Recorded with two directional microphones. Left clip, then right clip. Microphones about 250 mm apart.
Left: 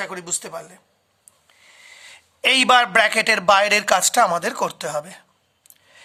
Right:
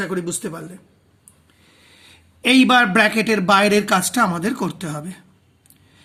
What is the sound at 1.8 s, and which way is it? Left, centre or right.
A man's voice, left.